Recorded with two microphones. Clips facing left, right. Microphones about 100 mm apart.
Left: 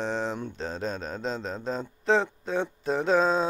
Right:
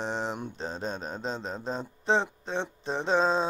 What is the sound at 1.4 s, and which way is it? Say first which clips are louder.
Speech: left 2 dB; 5° right (ahead or behind).